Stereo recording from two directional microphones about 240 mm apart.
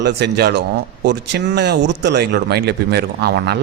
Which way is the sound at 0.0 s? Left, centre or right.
Right.